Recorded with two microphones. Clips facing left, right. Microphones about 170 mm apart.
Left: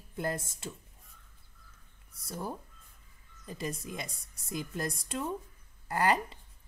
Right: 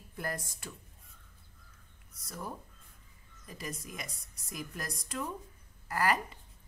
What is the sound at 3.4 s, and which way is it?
A woman's voice, 30° left (ahead or behind).